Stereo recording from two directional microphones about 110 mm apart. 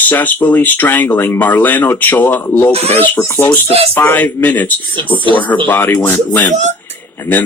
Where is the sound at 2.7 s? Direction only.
70° right (ahead or behind).